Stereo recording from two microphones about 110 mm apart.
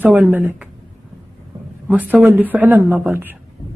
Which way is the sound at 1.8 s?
15° right (ahead or behind).